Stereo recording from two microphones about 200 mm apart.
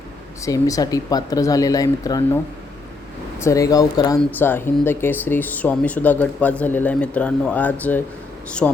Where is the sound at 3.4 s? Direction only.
15° left (ahead or behind).